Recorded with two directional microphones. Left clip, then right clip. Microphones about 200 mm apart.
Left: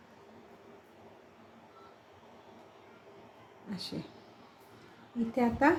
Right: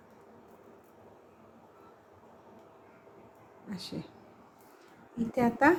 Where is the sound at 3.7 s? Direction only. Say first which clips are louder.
Left 1 dB; 10° right (ahead or behind).